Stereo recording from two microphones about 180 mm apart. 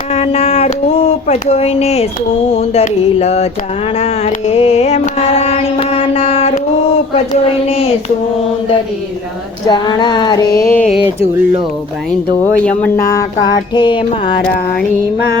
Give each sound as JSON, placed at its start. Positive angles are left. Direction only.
{"t": 0.1, "sound": "speech", "side_deg": 35}
{"t": 9.6, "sound": "music", "side_deg": 20}
{"t": 10.7, "sound": "speech", "side_deg": 10}
{"t": 12.5, "sound": "speech", "side_deg": 10}
{"t": 13.0, "sound": "music", "side_deg": 20}